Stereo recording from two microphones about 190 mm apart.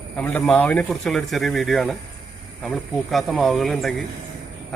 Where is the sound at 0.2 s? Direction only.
5° left (ahead or behind).